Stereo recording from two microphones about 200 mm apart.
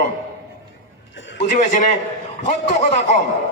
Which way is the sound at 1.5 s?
40° left (ahead or behind).